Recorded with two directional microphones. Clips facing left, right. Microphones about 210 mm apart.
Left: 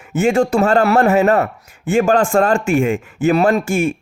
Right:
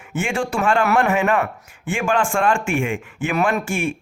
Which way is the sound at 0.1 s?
40° left (ahead or behind).